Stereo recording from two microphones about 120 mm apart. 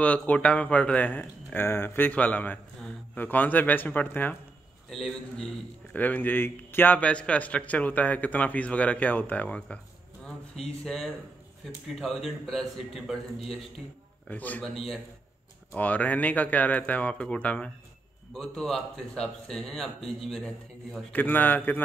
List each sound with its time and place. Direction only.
0.0 s speech: 10° left (ahead or behind)
4.8 s speech: centre (ahead or behind)
5.9 s speech: 15° left (ahead or behind); by 13.2 s centre (ahead or behind)
14.2 s speech: 15° left (ahead or behind)
14.6 s speech: centre (ahead or behind)
15.7 s speech: 15° left (ahead or behind)
21.1 s speech: 15° left (ahead or behind)